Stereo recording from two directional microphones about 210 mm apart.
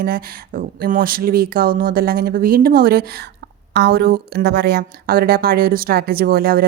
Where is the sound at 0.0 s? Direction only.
45° right (ahead or behind).